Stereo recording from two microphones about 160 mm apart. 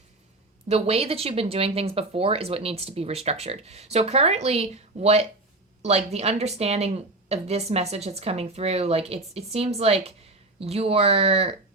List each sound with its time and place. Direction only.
0.7 s speech: 40° right (ahead or behind)